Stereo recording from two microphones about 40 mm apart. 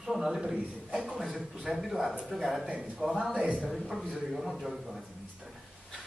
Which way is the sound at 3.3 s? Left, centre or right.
Right.